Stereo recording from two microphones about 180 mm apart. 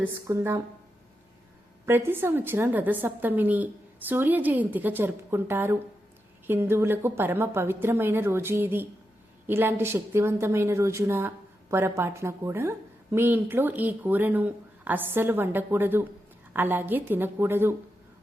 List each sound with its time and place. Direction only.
0.0 s speech: 15° right (ahead or behind)
1.9 s speech: 10° right (ahead or behind)